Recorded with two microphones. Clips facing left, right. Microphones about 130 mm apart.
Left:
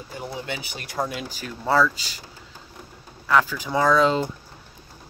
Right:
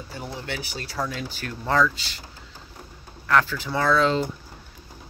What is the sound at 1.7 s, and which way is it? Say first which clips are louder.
Speech: left 2 dB; 10° left (ahead or behind).